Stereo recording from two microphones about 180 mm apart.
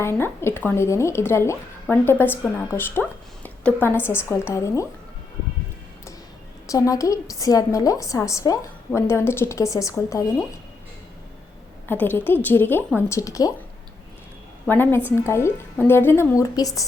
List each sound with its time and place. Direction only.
0.0 s speech: 15° left (ahead or behind)
6.7 s speech: 20° left (ahead or behind)
11.9 s speech: 10° left (ahead or behind)
14.7 s speech: 10° left (ahead or behind)